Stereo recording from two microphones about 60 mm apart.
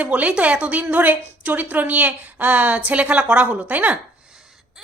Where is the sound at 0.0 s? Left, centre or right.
Right.